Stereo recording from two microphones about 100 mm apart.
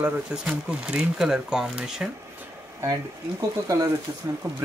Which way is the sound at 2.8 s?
35° right (ahead or behind).